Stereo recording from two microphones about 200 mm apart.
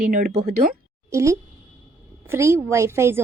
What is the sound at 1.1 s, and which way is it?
A woman's voice, 15° right (ahead or behind).